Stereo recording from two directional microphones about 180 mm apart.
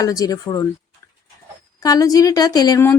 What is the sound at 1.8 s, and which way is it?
Speech, 20° left (ahead or behind).